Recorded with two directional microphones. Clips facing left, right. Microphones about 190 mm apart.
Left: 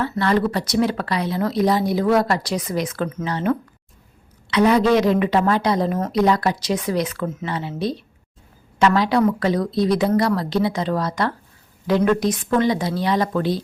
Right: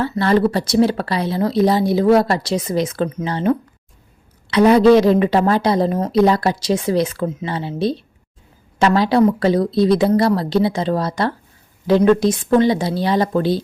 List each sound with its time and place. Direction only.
0.0 s a woman's voice: 30° right (ahead or behind)